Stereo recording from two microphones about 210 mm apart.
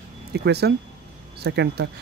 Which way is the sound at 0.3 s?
50° right (ahead or behind).